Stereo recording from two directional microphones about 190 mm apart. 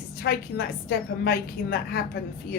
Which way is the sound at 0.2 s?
55° left (ahead or behind).